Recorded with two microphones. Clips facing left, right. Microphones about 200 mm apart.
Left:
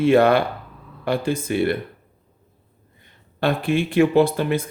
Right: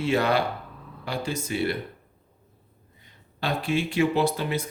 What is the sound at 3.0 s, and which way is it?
Speech, 55° left (ahead or behind).